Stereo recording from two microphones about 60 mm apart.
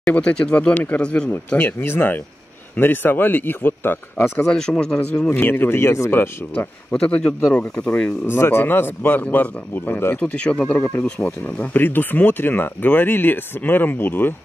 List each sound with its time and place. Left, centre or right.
0.1 s speech: centre
1.6 s speech: left
4.5 s speech: centre
5.3 s speech: left
6.9 s speech: centre
8.3 s speech: left
10.2 s speech: centre; by 14.3 s left